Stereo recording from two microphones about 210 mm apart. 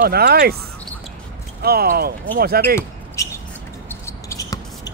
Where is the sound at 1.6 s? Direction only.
45° right (ahead or behind).